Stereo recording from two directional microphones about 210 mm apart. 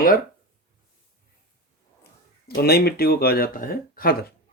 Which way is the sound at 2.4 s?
50° left (ahead or behind).